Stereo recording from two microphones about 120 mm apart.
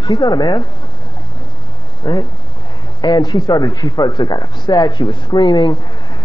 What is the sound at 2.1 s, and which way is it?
Speech, 40° left (ahead or behind).